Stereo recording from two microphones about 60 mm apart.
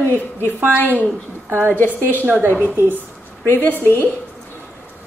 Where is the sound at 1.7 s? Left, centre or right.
Left.